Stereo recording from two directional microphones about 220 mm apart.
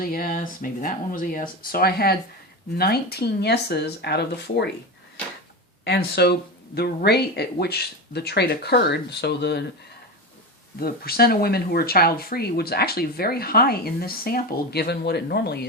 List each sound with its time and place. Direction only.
0.0 s speech: 40° left (ahead or behind)
5.8 s speech: 50° left (ahead or behind)
10.8 s speech: 45° left (ahead or behind)